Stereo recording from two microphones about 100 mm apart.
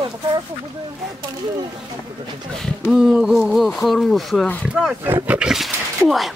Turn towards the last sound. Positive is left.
turn(degrees=0)  # may be behind; listen again after turning